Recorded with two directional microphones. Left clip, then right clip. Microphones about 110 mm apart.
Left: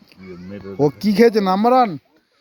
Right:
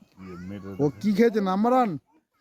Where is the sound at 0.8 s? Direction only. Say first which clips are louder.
Left 8 dB; 25° left (ahead or behind).